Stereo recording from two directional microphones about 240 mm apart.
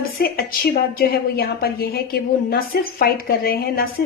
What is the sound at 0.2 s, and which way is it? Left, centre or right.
Speech, left.